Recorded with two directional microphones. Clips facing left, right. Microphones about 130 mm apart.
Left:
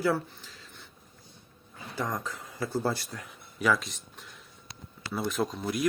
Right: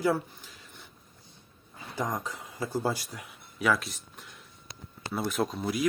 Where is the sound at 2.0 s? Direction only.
15° right (ahead or behind).